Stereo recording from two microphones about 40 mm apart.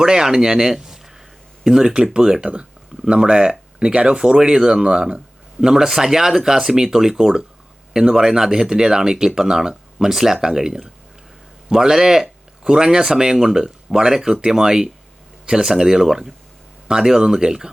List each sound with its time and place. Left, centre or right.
0.0 s a man's voice: centre